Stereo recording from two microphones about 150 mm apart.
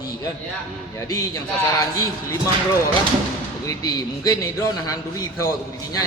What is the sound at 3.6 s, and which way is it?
A man's voice, 25° left (ahead or behind).